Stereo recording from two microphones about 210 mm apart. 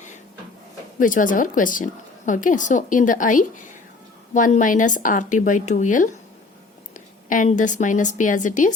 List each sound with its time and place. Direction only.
0.9 s a woman's voice: 40° left (ahead or behind)